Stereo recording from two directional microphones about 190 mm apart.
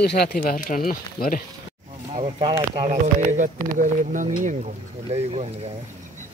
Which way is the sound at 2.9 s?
40° right (ahead or behind).